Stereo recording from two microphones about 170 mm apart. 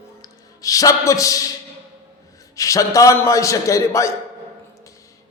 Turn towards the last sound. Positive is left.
turn(degrees=20)  # may be behind; listen again after turning